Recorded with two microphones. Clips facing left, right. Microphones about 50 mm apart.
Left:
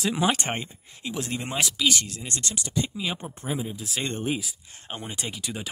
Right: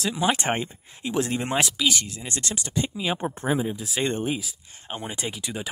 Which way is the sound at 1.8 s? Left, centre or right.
Centre.